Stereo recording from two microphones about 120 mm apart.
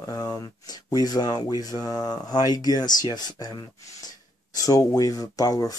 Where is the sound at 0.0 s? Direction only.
30° left (ahead or behind).